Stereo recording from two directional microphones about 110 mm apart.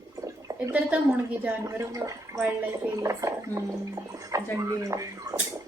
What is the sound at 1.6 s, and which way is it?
Speech, 30° right (ahead or behind).